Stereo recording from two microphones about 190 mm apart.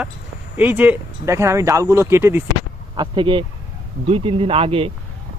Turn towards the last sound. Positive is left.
turn(degrees=-30)  # may be behind; listen again after turning